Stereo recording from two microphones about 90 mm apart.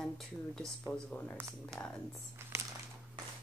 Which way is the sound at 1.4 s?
35° right (ahead or behind).